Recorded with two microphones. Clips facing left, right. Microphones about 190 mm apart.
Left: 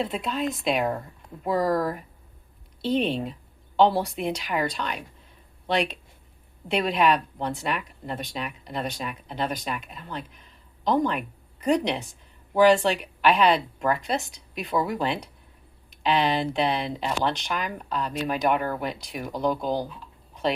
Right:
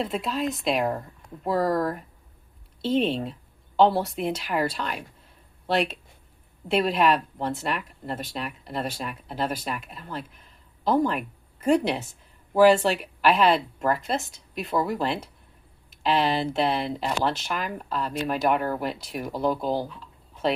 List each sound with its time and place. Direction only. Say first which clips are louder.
0.0 s speech: even; centre (ahead or behind)